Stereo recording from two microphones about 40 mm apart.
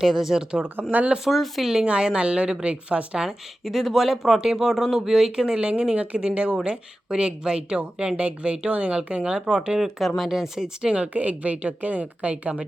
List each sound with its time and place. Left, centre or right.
0.0 s speech: centre
0.8 s speech: right
1.2 s speech: centre
1.8 s speech: right
3.2 s speech: centre
5.5 s a woman's voice: right
9.3 s speech: centre
11.1 s a woman's voice: right